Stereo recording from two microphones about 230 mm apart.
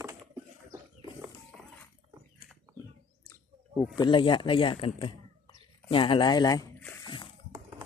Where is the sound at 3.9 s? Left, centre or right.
Centre.